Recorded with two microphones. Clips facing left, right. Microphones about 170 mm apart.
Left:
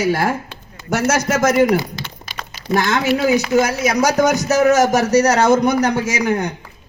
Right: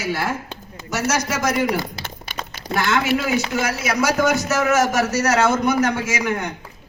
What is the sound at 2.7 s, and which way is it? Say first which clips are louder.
A man's voice: left 3 dB; 40° left (ahead or behind).